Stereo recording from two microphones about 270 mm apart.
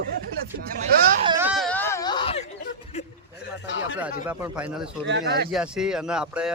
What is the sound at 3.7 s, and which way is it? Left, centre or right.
Speech, left.